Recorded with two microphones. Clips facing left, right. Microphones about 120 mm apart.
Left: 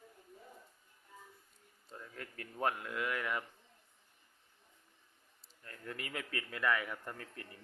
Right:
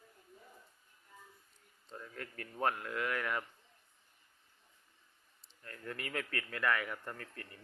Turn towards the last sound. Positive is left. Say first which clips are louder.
# right 1 dB
turn(degrees=15)  # may be behind; listen again after turning